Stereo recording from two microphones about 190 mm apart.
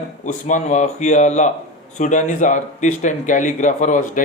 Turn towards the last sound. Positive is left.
turn(degrees=40)  # may be behind; listen again after turning